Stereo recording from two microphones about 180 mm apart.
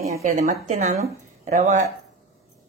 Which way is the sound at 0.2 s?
40° right (ahead or behind).